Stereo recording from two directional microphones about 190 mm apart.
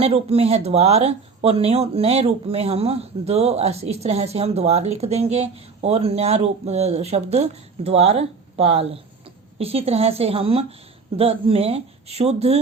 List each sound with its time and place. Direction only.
0.0 s speech: 30° right (ahead or behind)